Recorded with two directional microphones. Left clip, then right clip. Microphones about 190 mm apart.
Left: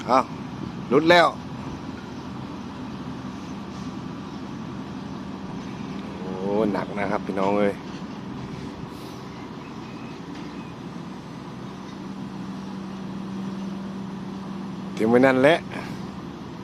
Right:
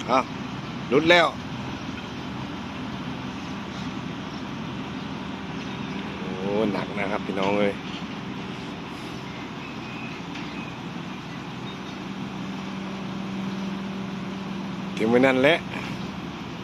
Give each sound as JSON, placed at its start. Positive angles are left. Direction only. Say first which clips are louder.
{"t": 0.1, "sound": "speech", "louder": "left 2 dB", "side_deg": 15}
{"t": 6.5, "sound": "speech", "louder": "left 2 dB", "side_deg": 15}
{"t": 14.9, "sound": "speech", "louder": "left 2 dB", "side_deg": 15}